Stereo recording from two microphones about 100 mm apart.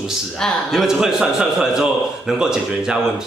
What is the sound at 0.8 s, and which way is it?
A man's voice, 5° right (ahead or behind).